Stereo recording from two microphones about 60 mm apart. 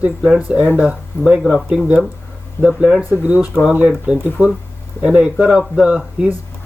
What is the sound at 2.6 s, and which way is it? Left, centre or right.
Speech, centre.